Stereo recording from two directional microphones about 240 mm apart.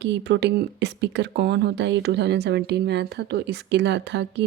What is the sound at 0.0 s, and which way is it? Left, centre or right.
Speech, right.